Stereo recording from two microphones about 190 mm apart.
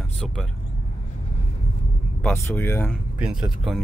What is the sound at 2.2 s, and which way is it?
Speech, 10° left (ahead or behind).